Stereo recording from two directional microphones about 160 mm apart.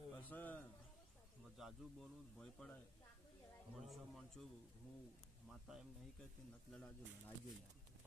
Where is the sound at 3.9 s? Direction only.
Centre (ahead or behind).